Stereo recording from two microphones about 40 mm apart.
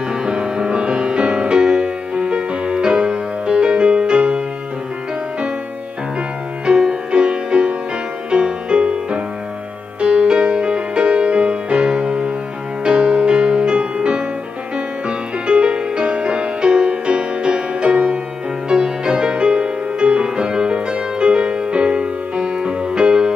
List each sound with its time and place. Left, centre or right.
0.1 s music: right
6.6 s music: right